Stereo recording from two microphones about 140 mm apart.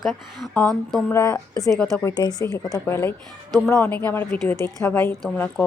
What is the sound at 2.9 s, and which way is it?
A woman's voice, 15° left (ahead or behind).